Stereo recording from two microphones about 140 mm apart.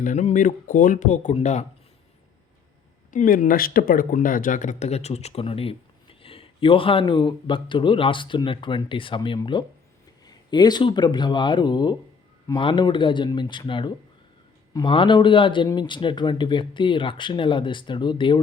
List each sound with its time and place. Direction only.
0.0 s speech: 60° left (ahead or behind)
3.1 s speech: 70° left (ahead or behind); by 18.3 s 35° left (ahead or behind)